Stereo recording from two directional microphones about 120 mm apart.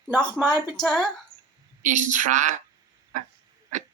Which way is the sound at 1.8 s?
90° right.